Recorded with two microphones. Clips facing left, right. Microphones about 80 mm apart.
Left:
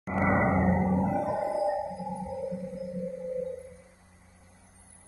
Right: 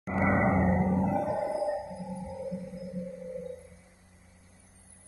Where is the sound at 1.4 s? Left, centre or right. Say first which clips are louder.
Left 2 dB; centre.